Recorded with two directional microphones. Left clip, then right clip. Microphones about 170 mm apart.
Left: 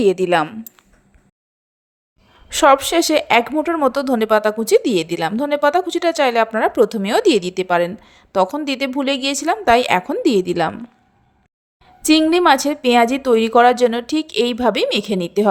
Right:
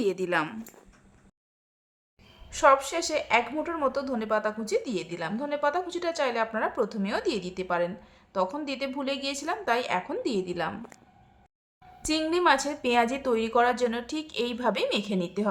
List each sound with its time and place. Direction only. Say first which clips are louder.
0.0 s a woman's voice: left 12 dB; 45° left (ahead or behind)
2.5 s a woman's voice: left 9 dB; 50° left (ahead or behind)
12.0 s a woman's voice: left 11 dB; 45° left (ahead or behind)